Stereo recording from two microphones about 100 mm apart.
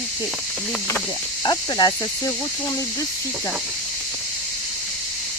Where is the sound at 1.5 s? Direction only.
45° left (ahead or behind).